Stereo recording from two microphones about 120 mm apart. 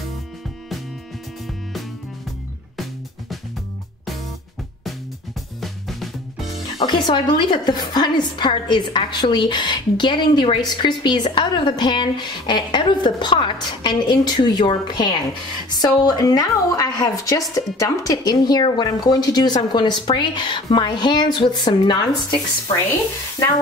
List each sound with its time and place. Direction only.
5.6 s music: centre (ahead or behind)
6.8 s a woman's voice: 40° left (ahead or behind)